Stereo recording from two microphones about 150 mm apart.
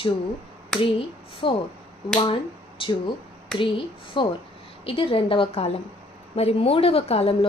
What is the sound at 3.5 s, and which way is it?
Speech, 5° left (ahead or behind).